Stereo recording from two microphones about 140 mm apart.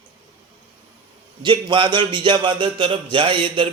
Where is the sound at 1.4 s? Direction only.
35° right (ahead or behind).